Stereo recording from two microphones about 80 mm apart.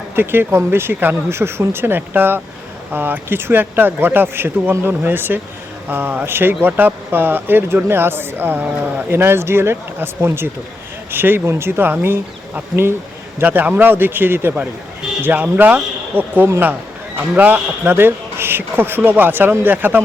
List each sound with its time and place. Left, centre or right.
0.2 s speech: right
13.4 s speech: right